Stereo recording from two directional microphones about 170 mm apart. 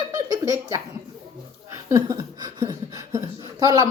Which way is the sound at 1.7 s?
20° right (ahead or behind).